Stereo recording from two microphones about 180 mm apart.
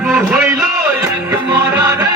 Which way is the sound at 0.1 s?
5° right (ahead or behind).